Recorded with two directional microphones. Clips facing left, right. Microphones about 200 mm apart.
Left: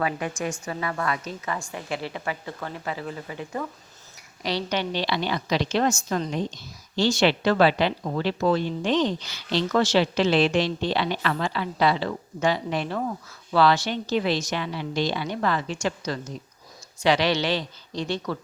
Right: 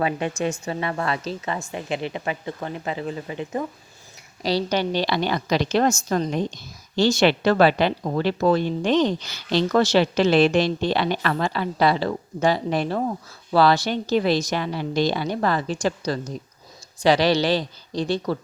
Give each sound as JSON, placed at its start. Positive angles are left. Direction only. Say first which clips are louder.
{"t": 0.6, "sound": "speech", "louder": "right 3 dB", "side_deg": -25}
{"t": 1.7, "sound": "speech", "louder": "right 4 dB", "side_deg": -20}
{"t": 4.4, "sound": "a woman's voice", "louder": "right 5 dB", "side_deg": -35}